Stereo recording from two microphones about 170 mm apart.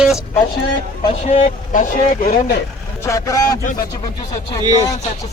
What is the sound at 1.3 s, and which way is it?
Speech, 45° left (ahead or behind).